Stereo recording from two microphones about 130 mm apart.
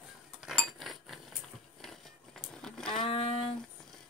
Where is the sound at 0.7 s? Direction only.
Centre (ahead or behind).